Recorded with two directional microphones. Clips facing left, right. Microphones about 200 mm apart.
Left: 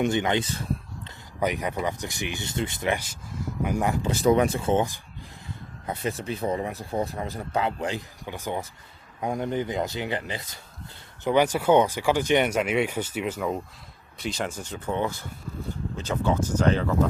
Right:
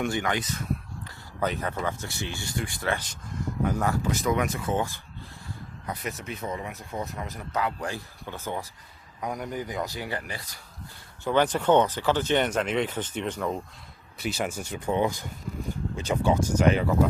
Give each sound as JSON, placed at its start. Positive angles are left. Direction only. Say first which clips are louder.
{"t": 0.0, "sound": "speech", "louder": "left 4 dB", "side_deg": 20}
{"t": 1.4, "sound": "speech", "louder": "left 2 dB", "side_deg": 15}
{"t": 4.1, "sound": "speech", "louder": "left 6 dB", "side_deg": 30}
{"t": 9.2, "sound": "speech", "louder": "left 5 dB", "side_deg": 25}
{"t": 14.2, "sound": "speech", "louder": "right 1 dB", "side_deg": -5}